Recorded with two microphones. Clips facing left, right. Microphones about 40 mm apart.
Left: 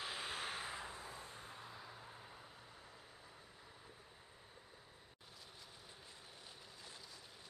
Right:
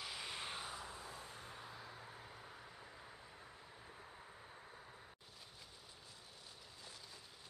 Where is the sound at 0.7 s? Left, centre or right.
Centre.